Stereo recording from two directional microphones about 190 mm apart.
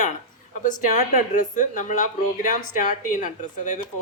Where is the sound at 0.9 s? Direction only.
40° left (ahead or behind).